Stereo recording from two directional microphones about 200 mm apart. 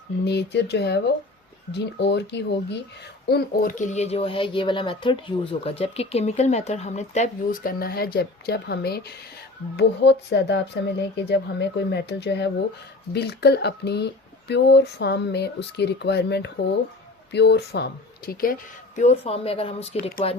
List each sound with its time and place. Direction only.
0.3 s speech: 55° left (ahead or behind)
18.9 s speech: 30° left (ahead or behind)